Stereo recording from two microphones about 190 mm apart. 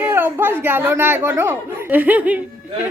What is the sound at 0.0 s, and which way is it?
Speech, 10° right (ahead or behind).